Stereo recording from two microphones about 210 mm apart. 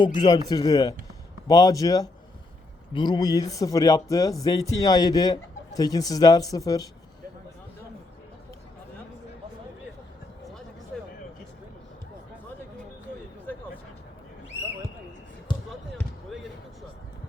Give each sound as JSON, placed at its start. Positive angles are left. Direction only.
{"t": 0.0, "sound": "speech", "side_deg": 20}
{"t": 16.0, "sound": "basketball bounce", "side_deg": 0}